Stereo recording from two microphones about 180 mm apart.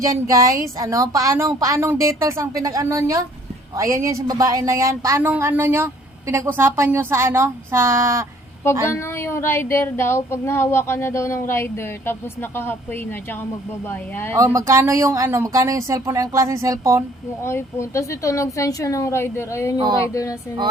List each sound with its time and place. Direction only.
0.0 s a woman's voice: 20° right (ahead or behind)
8.9 s speech: 15° left (ahead or behind)
14.3 s a woman's voice: 20° right (ahead or behind)
17.4 s speech: 15° left (ahead or behind)